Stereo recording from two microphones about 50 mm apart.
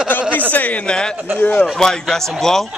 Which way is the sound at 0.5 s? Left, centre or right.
Left.